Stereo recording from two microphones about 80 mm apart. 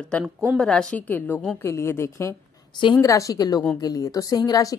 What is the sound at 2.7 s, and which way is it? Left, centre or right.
Speech, left.